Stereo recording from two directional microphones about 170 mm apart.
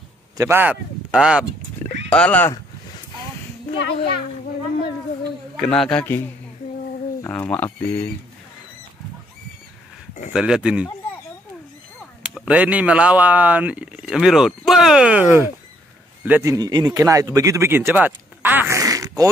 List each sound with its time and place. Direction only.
0.4 s speech: 15° right (ahead or behind)
2.0 s speech: 5° left (ahead or behind)
5.6 s speech: 5° left (ahead or behind)
7.2 s speech: 10° left (ahead or behind)
10.3 s speech: 5° right (ahead or behind)
12.4 s speech: 5° right (ahead or behind)
16.5 s speech: 25° right (ahead or behind)